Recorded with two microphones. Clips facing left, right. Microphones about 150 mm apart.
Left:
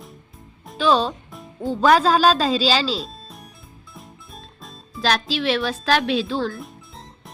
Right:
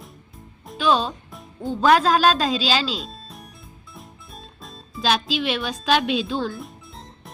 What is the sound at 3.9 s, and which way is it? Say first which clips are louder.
Music: left 1 dB; centre (ahead or behind).